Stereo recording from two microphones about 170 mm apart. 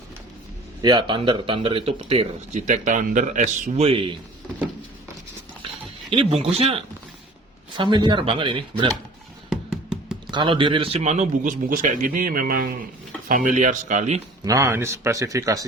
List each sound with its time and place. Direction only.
0.8 s speech: 25° right (ahead or behind); by 3.8 s 45° right (ahead or behind)
3.8 s speech: 30° right (ahead or behind)
6.4 s speech: 35° right (ahead or behind)
9.9 s music: 5° right (ahead or behind)
10.3 s a man's voice: 30° right (ahead or behind); by 14.2 s 45° right (ahead or behind)
14.4 s speech: 15° right (ahead or behind)